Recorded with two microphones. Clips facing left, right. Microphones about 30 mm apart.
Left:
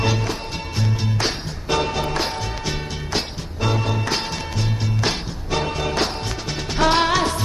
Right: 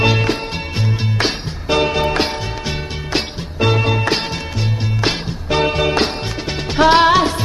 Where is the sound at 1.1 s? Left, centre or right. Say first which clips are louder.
Right 4 dB; right.